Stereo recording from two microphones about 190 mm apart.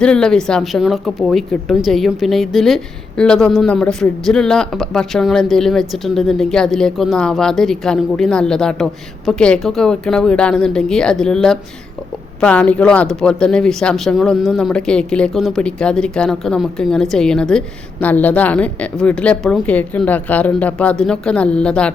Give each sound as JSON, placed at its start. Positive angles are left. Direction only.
{"t": 0.0, "sound": "a woman's voice", "side_deg": 5}